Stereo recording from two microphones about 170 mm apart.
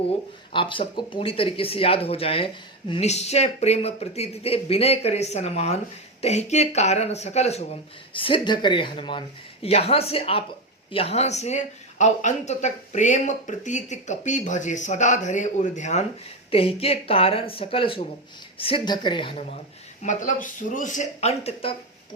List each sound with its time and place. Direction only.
0.5 s speech: 30° left (ahead or behind)
20.0 s speech: 45° left (ahead or behind)